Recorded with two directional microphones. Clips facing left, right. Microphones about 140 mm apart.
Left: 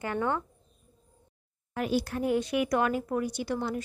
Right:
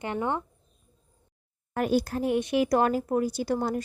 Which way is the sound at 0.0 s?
20° right (ahead or behind).